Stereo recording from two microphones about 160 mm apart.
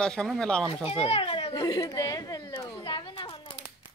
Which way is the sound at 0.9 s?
35° left (ahead or behind).